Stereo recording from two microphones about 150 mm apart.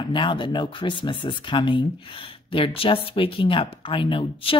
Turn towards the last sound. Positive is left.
turn(degrees=35)  # may be behind; listen again after turning